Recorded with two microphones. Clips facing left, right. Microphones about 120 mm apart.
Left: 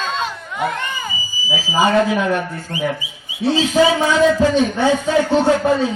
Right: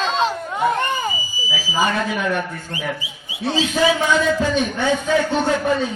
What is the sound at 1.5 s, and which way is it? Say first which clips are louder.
Speech: left 6 dB; 20° left (ahead or behind).